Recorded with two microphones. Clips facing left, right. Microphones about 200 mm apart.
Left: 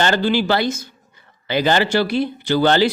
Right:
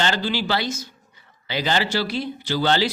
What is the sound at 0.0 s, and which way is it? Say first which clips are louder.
A man's voice: left 6 dB; 50° left (ahead or behind).